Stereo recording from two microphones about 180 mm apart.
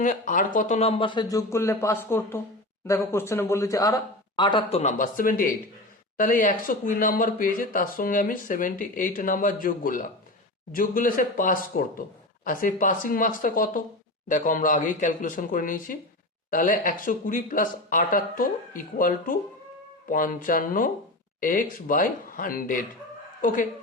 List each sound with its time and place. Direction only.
0.0 s speech: 45° left (ahead or behind); by 4.8 s 25° left (ahead or behind)
4.8 s speech: 45° left (ahead or behind)